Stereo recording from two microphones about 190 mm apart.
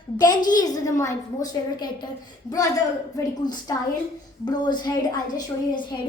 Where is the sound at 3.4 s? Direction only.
20° left (ahead or behind).